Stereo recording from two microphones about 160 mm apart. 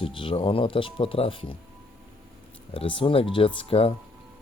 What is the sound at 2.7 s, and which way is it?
Speech, 35° left (ahead or behind).